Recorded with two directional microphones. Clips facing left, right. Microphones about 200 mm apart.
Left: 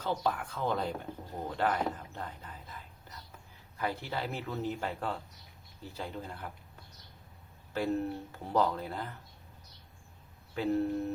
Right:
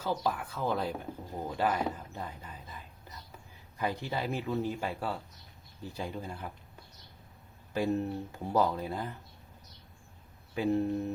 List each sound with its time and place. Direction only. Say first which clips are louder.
0.0 s speech: even; 5° right (ahead or behind)
7.7 s speech: right 1 dB; 15° right (ahead or behind)
10.5 s speech: right 1 dB; 15° right (ahead or behind)